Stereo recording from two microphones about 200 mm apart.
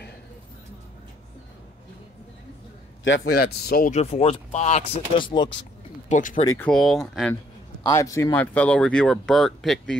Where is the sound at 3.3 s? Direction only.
50° left (ahead or behind).